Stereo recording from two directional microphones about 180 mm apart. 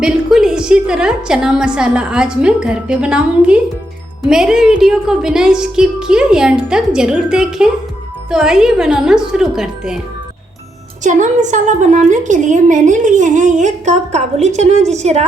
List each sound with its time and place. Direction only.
0.0 s a woman's voice: 5° right (ahead or behind)
11.0 s a woman's voice: 45° right (ahead or behind)